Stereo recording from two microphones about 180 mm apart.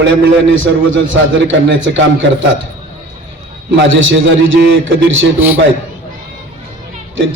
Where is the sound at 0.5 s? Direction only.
90° right.